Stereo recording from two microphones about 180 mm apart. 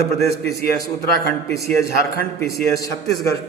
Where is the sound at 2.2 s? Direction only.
15° left (ahead or behind).